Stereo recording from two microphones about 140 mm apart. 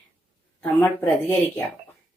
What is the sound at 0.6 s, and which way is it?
Speech, 15° left (ahead or behind).